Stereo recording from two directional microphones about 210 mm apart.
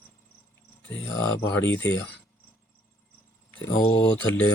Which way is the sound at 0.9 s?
10° left (ahead or behind).